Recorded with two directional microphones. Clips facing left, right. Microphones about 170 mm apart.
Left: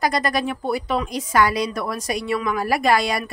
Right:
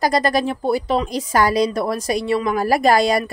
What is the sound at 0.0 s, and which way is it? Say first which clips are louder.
Speech: right 4 dB; 35° right (ahead or behind).